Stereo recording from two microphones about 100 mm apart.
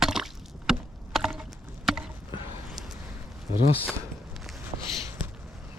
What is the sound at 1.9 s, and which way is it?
Chop, 5° right (ahead or behind).